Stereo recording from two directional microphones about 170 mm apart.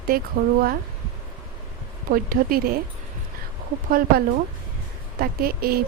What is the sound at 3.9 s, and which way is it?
A woman's voice, 60° right (ahead or behind).